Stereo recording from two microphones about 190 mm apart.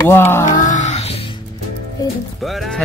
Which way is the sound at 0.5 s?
40° left (ahead or behind).